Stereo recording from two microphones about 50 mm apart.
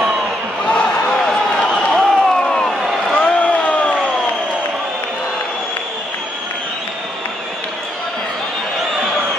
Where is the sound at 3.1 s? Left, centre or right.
Left.